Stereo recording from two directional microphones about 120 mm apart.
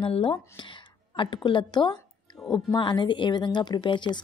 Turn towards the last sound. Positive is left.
turn(degrees=40)  # may be behind; listen again after turning